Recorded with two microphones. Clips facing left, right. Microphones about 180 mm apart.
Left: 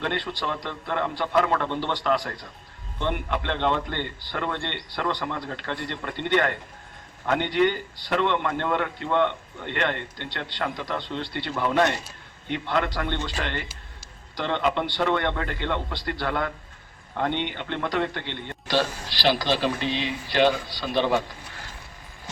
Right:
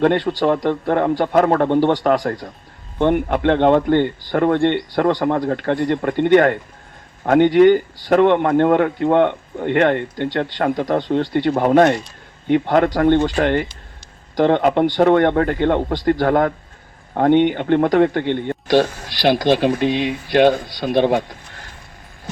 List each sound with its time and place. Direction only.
0.0 s speech: 50° right (ahead or behind)